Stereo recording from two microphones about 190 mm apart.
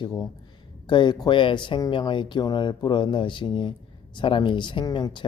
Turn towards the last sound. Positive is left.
turn(degrees=25)  # may be behind; listen again after turning